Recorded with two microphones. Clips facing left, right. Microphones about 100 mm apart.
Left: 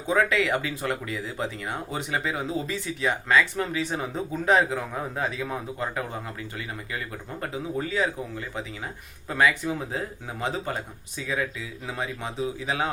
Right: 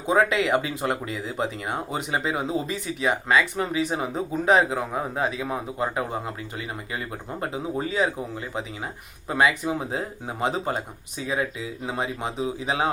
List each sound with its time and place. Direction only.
0.0 s speech: 20° right (ahead or behind)